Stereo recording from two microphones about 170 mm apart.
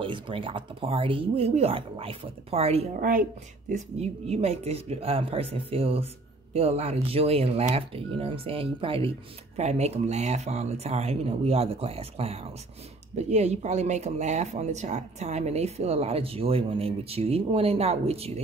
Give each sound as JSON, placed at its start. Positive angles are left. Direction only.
{"t": 0.0, "sound": "speech", "side_deg": -30}
{"t": 3.0, "sound": "speech", "side_deg": -55}